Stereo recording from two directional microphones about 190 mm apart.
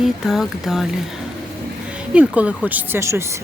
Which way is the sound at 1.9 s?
5° right (ahead or behind).